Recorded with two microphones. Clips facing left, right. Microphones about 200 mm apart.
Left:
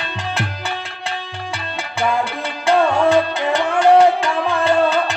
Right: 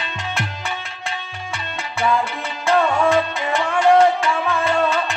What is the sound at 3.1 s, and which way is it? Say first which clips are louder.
Music: left 3 dB; 35° left (ahead or behind).